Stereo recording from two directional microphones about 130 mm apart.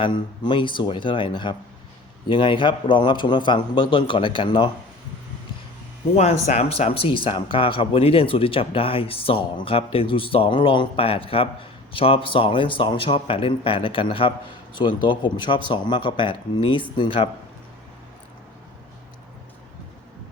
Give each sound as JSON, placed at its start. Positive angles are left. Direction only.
{"t": 0.0, "sound": "a man's voice", "side_deg": 40}
{"t": 6.1, "sound": "a man's voice", "side_deg": 60}